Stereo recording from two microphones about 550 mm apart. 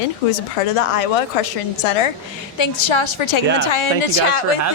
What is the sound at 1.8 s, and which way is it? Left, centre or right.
Speech, left.